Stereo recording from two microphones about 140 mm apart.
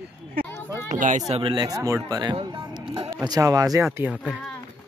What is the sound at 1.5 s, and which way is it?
Speech, 30° right (ahead or behind).